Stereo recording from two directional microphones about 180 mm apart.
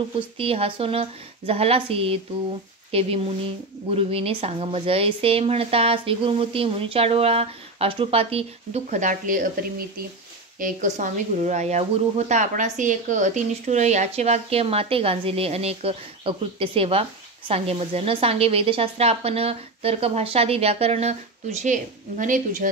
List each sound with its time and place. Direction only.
0.4 s speech: 30° right (ahead or behind); by 22.7 s 50° right (ahead or behind)